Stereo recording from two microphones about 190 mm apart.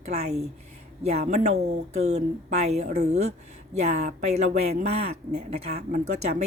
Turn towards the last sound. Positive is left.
turn(degrees=-35)  # may be behind; listen again after turning